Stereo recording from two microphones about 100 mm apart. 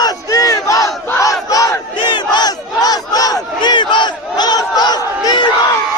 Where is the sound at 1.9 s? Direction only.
50° left (ahead or behind).